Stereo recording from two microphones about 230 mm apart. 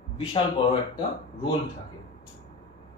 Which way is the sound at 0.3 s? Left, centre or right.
Left.